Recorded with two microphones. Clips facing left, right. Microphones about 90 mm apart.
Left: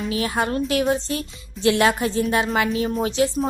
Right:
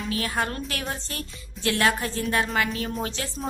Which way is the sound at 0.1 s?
20° left (ahead or behind).